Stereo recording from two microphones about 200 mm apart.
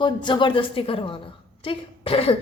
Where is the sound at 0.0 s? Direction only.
25° left (ahead or behind).